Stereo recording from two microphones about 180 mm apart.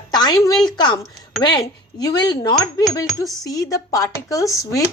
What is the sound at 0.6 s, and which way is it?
Speech, 25° left (ahead or behind).